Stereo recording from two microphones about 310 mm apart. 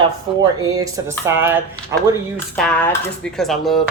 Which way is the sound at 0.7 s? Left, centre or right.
Centre.